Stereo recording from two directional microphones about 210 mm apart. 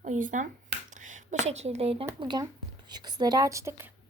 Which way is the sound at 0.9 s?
35° right (ahead or behind).